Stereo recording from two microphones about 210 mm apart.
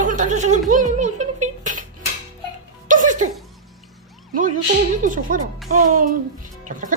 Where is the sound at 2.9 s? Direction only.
35° right (ahead or behind).